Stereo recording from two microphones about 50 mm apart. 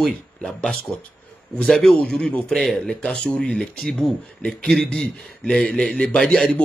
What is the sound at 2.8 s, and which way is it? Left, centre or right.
Speech, centre.